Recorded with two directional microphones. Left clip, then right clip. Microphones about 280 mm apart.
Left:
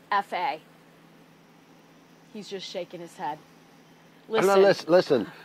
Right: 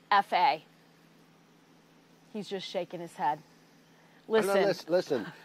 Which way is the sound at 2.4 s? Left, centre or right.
Right.